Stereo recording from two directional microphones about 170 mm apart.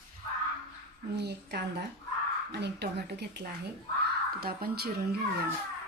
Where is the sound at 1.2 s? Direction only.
75° right (ahead or behind).